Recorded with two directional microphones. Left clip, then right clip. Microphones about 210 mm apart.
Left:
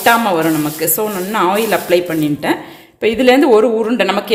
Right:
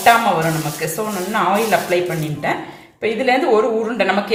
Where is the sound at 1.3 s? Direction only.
55° left (ahead or behind).